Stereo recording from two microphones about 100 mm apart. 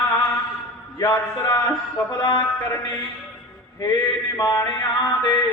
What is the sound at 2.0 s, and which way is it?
Speech, 45° left (ahead or behind).